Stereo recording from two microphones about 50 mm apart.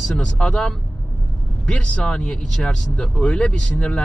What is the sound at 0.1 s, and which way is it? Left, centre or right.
Speech, centre.